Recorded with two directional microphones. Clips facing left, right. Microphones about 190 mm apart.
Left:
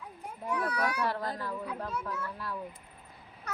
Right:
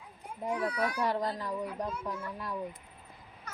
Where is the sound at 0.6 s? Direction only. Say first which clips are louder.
Left 1 dB; 65° left (ahead or behind).